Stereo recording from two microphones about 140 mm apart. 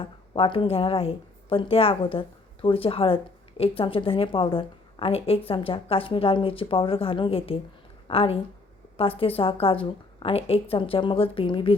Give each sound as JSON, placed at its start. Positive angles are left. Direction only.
{"t": 0.0, "sound": "a woman's voice", "side_deg": 40}